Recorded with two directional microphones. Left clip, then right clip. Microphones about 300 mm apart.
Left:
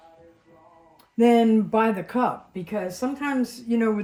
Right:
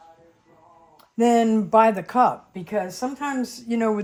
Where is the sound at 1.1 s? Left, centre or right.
Right.